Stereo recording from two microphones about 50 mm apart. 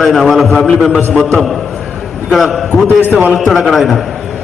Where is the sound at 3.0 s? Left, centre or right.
Right.